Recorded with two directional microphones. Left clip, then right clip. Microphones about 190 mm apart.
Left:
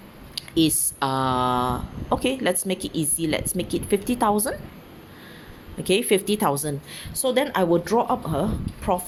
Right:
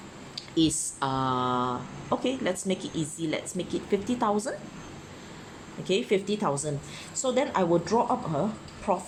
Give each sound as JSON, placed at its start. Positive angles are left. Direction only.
{"t": 0.3, "sound": "speech", "side_deg": 35}
{"t": 5.8, "sound": "a woman's voice", "side_deg": 40}